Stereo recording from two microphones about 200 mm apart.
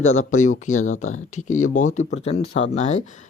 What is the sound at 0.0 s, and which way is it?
Speech, 90° left.